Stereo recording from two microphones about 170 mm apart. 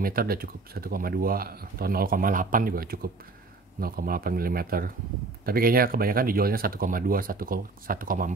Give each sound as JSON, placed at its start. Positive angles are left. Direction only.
{"t": 0.0, "sound": "speech", "side_deg": -60}